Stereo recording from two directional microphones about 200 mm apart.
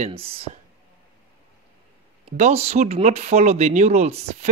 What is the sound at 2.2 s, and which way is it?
Speech, 30° right (ahead or behind).